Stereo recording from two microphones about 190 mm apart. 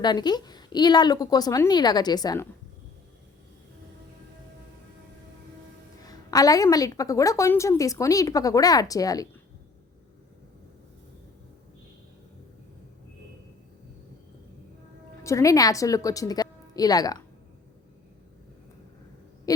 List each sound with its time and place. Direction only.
0.0 s a woman's voice: 20° left (ahead or behind)
6.0 s a woman's voice: 20° left (ahead or behind)
15.2 s speech: 15° left (ahead or behind)
19.5 s a sound: 20° left (ahead or behind)